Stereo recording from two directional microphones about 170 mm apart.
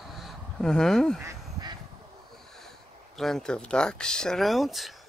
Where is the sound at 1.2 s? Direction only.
25° right (ahead or behind).